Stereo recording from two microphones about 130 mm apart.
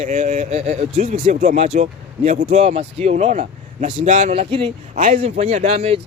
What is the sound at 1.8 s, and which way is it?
Speech, 75° right (ahead or behind).